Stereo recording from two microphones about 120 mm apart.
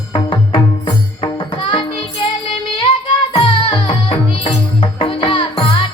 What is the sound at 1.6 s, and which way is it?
Music, 45° left (ahead or behind).